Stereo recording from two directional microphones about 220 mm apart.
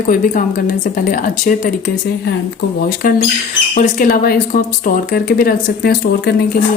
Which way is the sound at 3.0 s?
40° left (ahead or behind).